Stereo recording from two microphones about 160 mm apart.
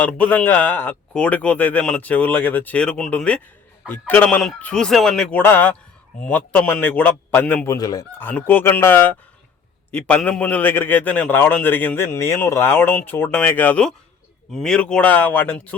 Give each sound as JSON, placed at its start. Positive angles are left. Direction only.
{"t": 0.0, "sound": "a man's voice", "side_deg": 10}
{"t": 7.8, "sound": "fowl", "side_deg": 25}
{"t": 8.2, "sound": "a man's voice", "side_deg": 10}